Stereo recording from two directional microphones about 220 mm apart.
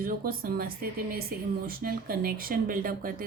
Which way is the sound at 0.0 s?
40° right (ahead or behind).